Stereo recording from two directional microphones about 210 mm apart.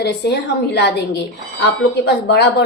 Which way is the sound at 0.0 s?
50° left (ahead or behind).